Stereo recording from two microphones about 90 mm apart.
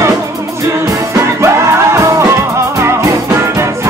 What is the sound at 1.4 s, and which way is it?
Music, 35° right (ahead or behind).